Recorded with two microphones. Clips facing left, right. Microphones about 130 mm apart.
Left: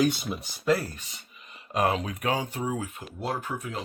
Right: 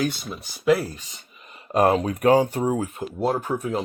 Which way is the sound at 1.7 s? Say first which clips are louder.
Right 7 dB; 40° right (ahead or behind).